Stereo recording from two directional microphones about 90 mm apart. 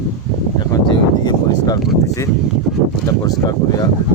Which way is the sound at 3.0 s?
45° left (ahead or behind).